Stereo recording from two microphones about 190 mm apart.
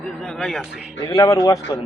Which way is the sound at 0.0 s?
5° left (ahead or behind).